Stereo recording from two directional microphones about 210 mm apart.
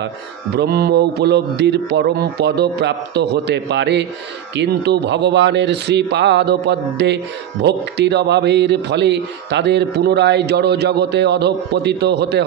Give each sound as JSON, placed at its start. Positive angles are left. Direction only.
{"t": 0.6, "sound": "a man's voice", "side_deg": -50}